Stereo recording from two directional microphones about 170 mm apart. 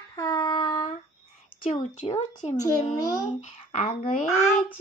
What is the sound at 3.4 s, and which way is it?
Speech, 45° left (ahead or behind).